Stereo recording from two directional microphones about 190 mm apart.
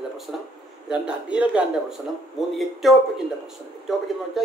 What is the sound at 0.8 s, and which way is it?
A man's voice, 5° right (ahead or behind).